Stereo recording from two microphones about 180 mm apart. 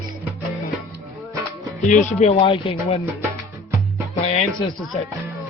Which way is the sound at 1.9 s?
40° left (ahead or behind).